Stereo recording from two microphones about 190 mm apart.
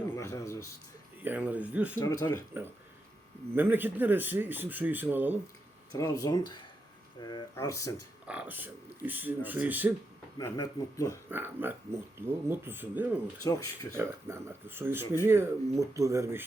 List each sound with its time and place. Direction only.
0.2 s music: 15° left (ahead or behind)
1.2 s speech: 10° right (ahead or behind)
2.2 s speech: 15° left (ahead or behind)
3.5 s speech: 10° right (ahead or behind)
5.9 s speech: 20° left (ahead or behind)
8.3 s speech: 10° right (ahead or behind)
10.3 s speech: 20° left (ahead or behind)
11.3 s speech: 10° right (ahead or behind)
13.5 s speech: 15° left (ahead or behind)
13.9 s speech: 15° right (ahead or behind)